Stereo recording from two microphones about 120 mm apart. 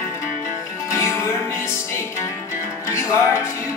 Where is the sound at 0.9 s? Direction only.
20° left (ahead or behind).